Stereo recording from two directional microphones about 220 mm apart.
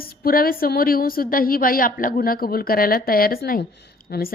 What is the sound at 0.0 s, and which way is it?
A woman's voice, 40° left (ahead or behind).